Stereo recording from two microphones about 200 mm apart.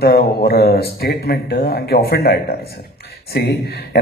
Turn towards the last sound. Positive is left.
turn(degrees=50)  # may be behind; listen again after turning